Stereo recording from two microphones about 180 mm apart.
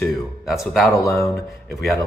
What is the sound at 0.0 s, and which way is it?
Speech, centre (ahead or behind).